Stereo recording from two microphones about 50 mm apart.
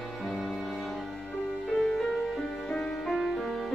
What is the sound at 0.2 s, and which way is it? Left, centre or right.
Music, centre.